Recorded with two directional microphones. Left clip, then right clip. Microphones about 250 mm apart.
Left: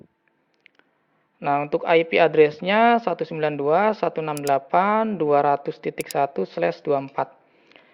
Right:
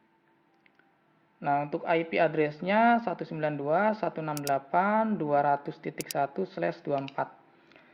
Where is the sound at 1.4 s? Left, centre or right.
Left.